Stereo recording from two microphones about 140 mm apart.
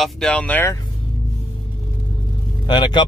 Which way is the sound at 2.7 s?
30° left (ahead or behind).